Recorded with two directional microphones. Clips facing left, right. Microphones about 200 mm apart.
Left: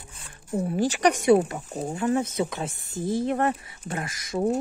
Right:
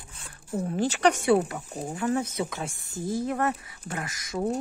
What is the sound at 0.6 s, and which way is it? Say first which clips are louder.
Speech: left 1 dB; 15° left (ahead or behind).